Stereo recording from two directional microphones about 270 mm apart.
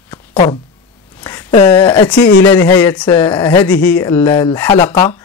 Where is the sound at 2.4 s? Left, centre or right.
Centre.